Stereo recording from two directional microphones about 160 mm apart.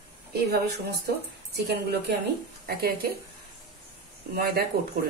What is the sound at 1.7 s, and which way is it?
Speech, 90° right.